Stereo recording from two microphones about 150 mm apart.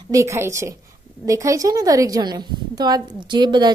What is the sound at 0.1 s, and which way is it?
A woman's voice, 20° right (ahead or behind).